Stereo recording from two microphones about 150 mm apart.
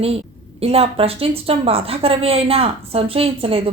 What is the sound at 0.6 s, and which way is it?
A woman's voice, 40° right (ahead or behind).